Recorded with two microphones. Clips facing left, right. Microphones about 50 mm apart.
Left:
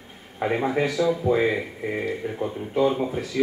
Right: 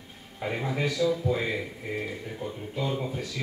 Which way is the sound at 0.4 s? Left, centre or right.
Left.